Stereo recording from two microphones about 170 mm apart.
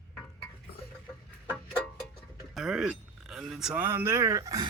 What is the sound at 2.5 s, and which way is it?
Speech, centre (ahead or behind).